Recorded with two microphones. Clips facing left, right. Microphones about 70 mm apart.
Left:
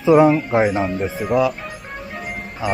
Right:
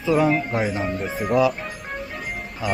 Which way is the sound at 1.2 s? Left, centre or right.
Centre.